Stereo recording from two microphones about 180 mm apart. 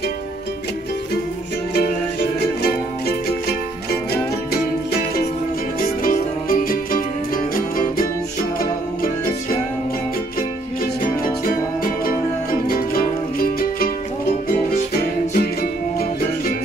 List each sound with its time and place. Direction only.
2.6 s music: 60° left (ahead or behind)
5.8 s music: 50° left (ahead or behind)
11.4 s music: 55° left (ahead or behind)
15.0 s music: 55° left (ahead or behind)